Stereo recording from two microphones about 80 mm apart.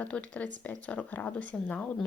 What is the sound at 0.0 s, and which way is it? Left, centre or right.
Speech, centre.